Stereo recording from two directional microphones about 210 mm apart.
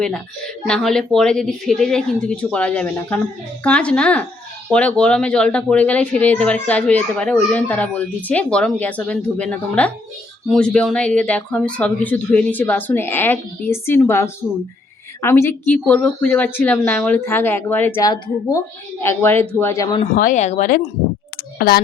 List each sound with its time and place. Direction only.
0.7 s speech: centre (ahead or behind)
20.1 s speech: 35° left (ahead or behind)